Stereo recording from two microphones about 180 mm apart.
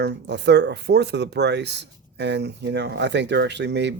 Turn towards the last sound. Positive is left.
turn(degrees=-75)  # may be behind; listen again after turning